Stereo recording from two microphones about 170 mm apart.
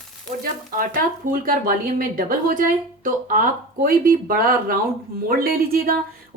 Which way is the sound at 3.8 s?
55° right (ahead or behind).